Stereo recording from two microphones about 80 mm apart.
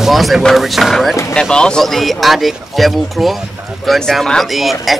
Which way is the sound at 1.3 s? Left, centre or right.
Centre.